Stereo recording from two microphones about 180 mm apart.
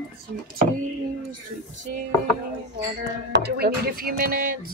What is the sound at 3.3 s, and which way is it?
Music, 65° right (ahead or behind).